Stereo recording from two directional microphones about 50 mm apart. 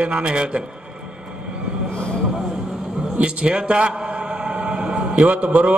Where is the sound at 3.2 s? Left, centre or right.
Right.